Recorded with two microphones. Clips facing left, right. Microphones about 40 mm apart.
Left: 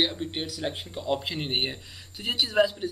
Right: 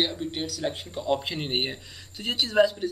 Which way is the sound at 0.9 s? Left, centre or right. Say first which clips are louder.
Right 2 dB; centre.